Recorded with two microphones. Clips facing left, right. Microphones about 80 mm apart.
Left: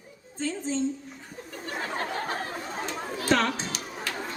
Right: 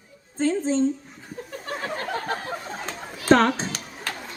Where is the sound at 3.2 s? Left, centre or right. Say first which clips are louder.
Right 7 dB; right.